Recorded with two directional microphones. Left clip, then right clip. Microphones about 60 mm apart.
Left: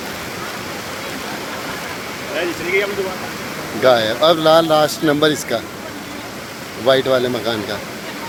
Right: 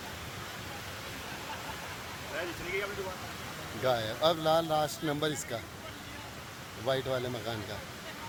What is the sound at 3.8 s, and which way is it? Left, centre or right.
Speech, right.